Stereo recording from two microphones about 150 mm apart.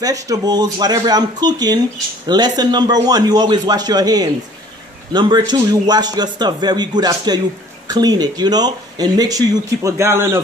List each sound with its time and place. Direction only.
0.0 s speech: 25° right (ahead or behind)